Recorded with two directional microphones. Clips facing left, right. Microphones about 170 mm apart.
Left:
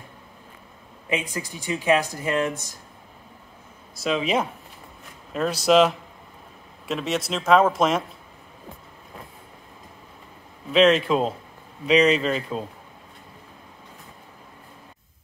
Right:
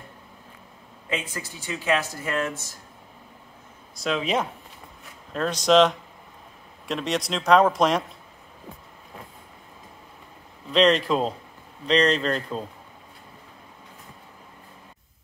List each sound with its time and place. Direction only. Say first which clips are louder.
1.0 s speech: left 3 dB; 15° left (ahead or behind)
4.0 s speech: left 2 dB; centre (ahead or behind)
10.7 s speech: left 2 dB; 5° left (ahead or behind)